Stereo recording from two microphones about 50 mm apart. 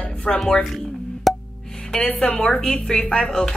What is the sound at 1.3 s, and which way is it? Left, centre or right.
Music, centre.